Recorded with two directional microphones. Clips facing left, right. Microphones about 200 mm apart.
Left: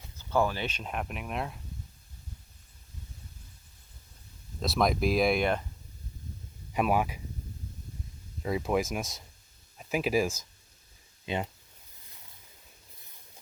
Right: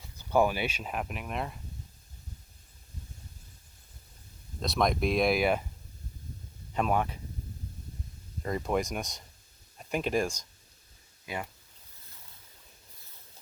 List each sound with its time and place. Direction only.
0.2 s speech: 15° right (ahead or behind)
4.6 s speech: centre (ahead or behind)
6.7 s speech: 10° left (ahead or behind)
8.4 s speech: 5° left (ahead or behind)
11.3 s speech: 25° left (ahead or behind)